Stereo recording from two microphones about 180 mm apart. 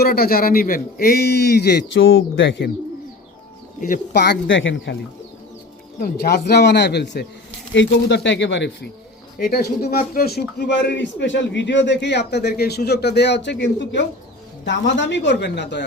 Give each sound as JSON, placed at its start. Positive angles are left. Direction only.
{"t": 0.0, "sound": "a man's voice", "side_deg": 55}
{"t": 3.8, "sound": "a man's voice", "side_deg": 50}
{"t": 6.0, "sound": "a man's voice", "side_deg": 60}
{"t": 7.7, "sound": "speech", "side_deg": 85}
{"t": 9.4, "sound": "a man's voice", "side_deg": 60}